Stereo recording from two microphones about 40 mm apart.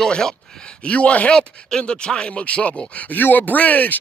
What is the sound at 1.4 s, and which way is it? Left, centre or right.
Speech, left.